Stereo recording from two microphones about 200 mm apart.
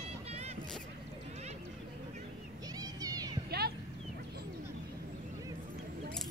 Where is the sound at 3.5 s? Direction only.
55° right (ahead or behind).